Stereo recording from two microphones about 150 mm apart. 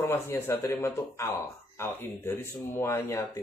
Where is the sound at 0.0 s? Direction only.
15° left (ahead or behind).